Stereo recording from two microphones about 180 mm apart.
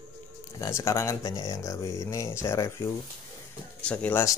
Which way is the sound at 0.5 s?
15° left (ahead or behind).